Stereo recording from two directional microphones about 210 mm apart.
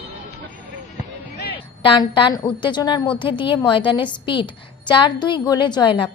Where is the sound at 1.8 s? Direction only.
25° left (ahead or behind).